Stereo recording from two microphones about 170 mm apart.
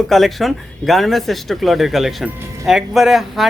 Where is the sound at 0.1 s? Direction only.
Centre (ahead or behind).